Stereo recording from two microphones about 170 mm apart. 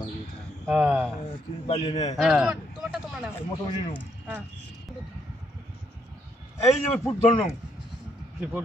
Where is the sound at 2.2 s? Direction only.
Centre (ahead or behind).